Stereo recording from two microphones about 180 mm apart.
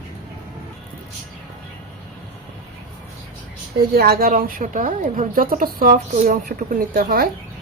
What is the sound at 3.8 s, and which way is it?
A woman's voice, 60° right (ahead or behind).